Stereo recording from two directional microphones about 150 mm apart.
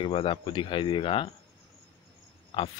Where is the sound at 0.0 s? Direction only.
35° left (ahead or behind).